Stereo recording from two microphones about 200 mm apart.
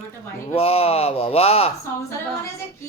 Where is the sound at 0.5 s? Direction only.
30° left (ahead or behind).